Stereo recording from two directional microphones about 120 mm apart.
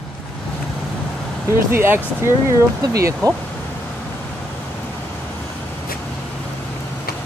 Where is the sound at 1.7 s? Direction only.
20° right (ahead or behind).